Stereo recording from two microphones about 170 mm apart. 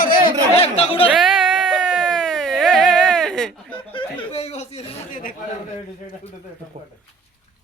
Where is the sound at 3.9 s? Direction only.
35° left (ahead or behind).